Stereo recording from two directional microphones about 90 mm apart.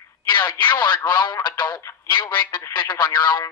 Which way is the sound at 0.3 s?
55° left (ahead or behind).